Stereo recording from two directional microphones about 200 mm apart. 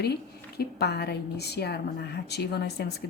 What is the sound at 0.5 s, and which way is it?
A woman's voice, 55° left (ahead or behind).